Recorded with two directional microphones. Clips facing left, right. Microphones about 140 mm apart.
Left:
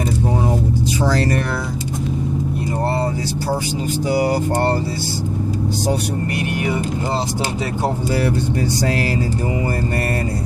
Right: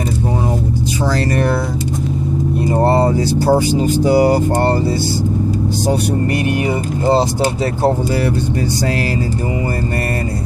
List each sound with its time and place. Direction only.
2.7 s speech: 60° right (ahead or behind)
4.1 s speech: 35° right (ahead or behind)
4.5 s speech: 55° right (ahead or behind)
6.7 s speech: 35° right (ahead or behind)